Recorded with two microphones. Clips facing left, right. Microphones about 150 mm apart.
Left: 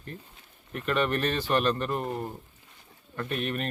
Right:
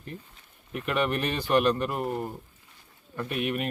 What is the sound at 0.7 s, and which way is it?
Speech, 10° right (ahead or behind).